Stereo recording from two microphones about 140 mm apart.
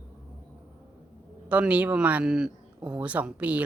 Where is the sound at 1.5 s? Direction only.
10° right (ahead or behind).